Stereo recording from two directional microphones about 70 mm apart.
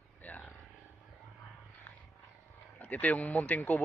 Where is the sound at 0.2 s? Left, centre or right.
Left.